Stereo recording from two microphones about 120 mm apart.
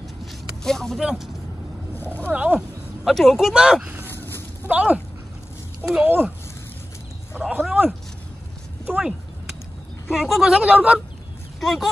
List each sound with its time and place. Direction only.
0.2 s vehicle: 5° left (ahead or behind)
2.0 s boat: 15° left (ahead or behind)
2.2 s speech: 10° right (ahead or behind)
3.8 s a sound: 15° right (ahead or behind)
4.6 s speech: 10° right (ahead or behind)
6.0 s speech: 15° right (ahead or behind)
7.3 s speech: 10° right (ahead or behind)
10.1 s speech: centre (ahead or behind)
11.6 s speech: centre (ahead or behind)